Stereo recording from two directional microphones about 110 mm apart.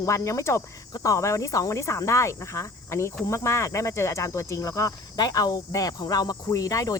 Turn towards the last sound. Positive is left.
turn(degrees=30)  # may be behind; listen again after turning